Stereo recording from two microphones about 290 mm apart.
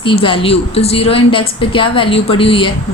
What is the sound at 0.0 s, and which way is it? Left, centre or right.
A woman's voice, centre.